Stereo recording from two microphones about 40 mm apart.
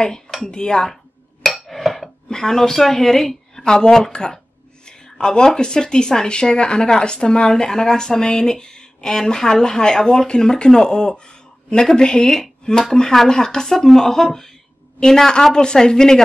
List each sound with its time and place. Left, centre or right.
0.4 s speech: left
1.4 s a sound: centre
2.2 s speech: centre
12.4 s speech: centre